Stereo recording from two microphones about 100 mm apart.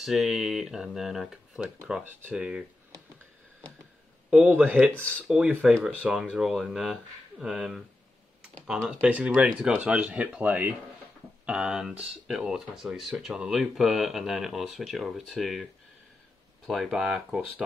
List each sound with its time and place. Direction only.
0.0 s speech: centre (ahead or behind)
4.6 s speech: 15° right (ahead or behind)
4.9 s speech: 15° left (ahead or behind)
5.5 s speech: 10° right (ahead or behind)
8.8 s speech: 10° right (ahead or behind)